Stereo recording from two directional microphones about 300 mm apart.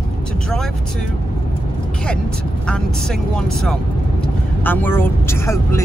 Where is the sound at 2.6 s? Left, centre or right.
Centre.